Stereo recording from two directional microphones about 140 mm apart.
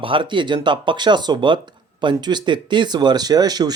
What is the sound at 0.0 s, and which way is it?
A man's voice, 40° right (ahead or behind).